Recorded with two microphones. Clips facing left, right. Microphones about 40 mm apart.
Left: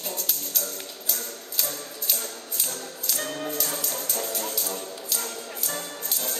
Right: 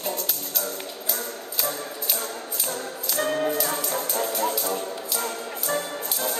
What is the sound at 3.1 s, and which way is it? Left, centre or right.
Music, centre.